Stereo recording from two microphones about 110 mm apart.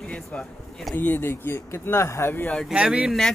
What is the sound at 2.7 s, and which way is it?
Speech, 10° right (ahead or behind).